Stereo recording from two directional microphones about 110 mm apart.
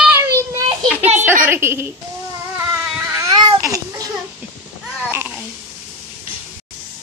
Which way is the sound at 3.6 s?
30° right (ahead or behind).